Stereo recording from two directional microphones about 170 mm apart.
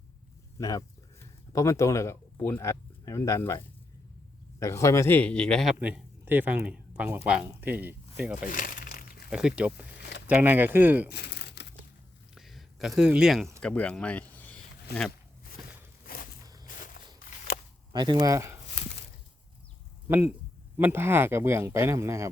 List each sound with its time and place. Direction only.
0.6 s speech: 20° left (ahead or behind)
4.6 s speech: 15° left (ahead or behind)
5.8 s speech: 10° right (ahead or behind)
8.4 s crumpling: 55° left (ahead or behind)
9.3 s speech: 5° right (ahead or behind)
11.1 s crumpling: 85° left
12.3 s a sound: centre (ahead or behind)
13.0 s speech: 5° right (ahead or behind)
16.0 s a sound: 55° left (ahead or behind)
16.7 s walk: 50° left (ahead or behind)
17.9 s speech: 25° right (ahead or behind)
20.1 s speech: 15° right (ahead or behind)